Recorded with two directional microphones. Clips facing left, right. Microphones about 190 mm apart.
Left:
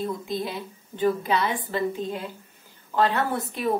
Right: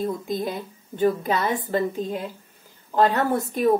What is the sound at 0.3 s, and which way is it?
A woman's voice, 45° right (ahead or behind).